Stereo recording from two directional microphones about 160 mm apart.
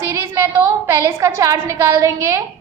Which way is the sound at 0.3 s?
15° right (ahead or behind).